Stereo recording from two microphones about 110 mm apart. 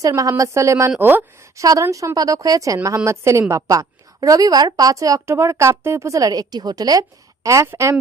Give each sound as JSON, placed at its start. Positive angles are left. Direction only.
{"t": 0.2, "sound": "a woman's voice", "side_deg": -30}
{"t": 1.5, "sound": "a woman's voice", "side_deg": -30}